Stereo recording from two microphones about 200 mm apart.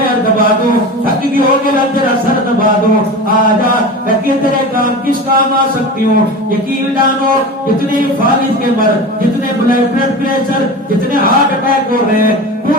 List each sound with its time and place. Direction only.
11.1 s chant: 45° right (ahead or behind)